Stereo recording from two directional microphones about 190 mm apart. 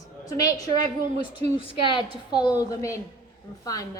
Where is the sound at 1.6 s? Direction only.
25° left (ahead or behind).